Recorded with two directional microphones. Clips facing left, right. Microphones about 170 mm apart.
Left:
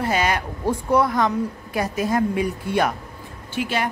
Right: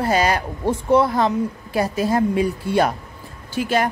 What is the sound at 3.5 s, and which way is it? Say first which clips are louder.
Speech: right 4 dB; 40° right (ahead or behind).